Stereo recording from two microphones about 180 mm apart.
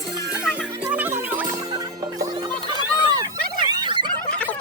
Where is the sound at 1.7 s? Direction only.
25° right (ahead or behind).